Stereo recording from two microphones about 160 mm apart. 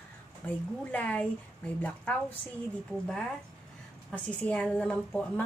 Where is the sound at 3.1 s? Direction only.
5° left (ahead or behind).